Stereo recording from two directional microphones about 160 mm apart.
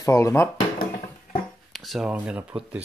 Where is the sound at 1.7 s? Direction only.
Centre (ahead or behind).